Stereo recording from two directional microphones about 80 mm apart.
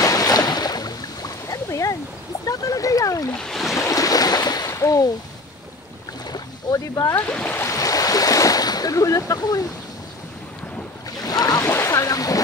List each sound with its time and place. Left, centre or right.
0.0 s a sound: left
2.4 s speech: left
3.3 s speech: centre
3.7 s boat: left
4.6 s a sound: left
6.2 s boat: left
7.2 s speech: centre
7.6 s waves: left
11.1 s boat: left
11.6 s a sound: left